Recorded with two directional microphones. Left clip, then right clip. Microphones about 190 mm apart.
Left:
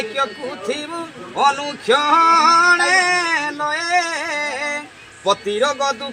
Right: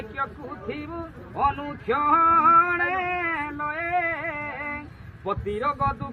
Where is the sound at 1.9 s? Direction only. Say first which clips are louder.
Left 6 dB; 10° right (ahead or behind).